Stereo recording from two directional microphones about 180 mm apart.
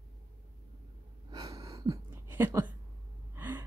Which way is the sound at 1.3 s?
20° right (ahead or behind).